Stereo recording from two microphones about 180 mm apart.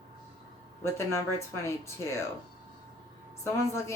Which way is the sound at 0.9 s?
15° left (ahead or behind).